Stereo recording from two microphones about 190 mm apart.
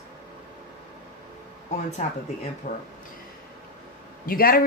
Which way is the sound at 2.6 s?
45° left (ahead or behind).